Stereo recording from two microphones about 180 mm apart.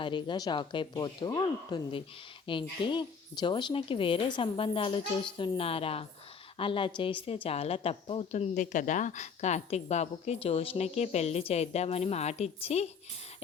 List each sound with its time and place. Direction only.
0.0 s a woman's voice: 25° left (ahead or behind)